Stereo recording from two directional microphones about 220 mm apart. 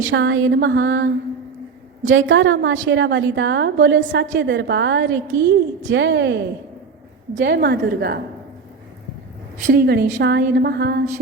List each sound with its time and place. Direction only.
0.0 s a woman's voice: 60° right (ahead or behind)
2.1 s a woman's voice: 60° right (ahead or behind)
9.6 s a woman's voice: 45° right (ahead or behind)